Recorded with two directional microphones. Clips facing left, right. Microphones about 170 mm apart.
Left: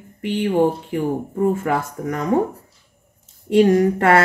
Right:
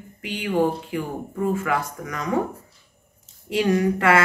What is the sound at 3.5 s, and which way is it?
Speech, 45° left (ahead or behind).